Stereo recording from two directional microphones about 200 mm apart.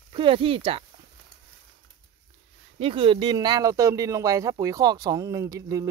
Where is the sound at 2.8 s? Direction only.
25° right (ahead or behind).